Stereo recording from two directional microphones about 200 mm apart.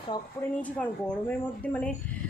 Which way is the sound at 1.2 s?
10° left (ahead or behind).